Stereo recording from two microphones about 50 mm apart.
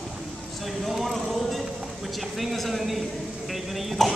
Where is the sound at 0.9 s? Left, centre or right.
Centre.